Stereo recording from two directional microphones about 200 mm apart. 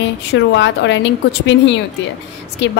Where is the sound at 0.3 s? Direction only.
60° left (ahead or behind).